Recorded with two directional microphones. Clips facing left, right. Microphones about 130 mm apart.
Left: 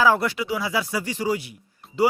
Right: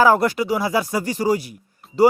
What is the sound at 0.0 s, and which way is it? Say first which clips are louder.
Speech: right 4 dB; 45° right (ahead or behind).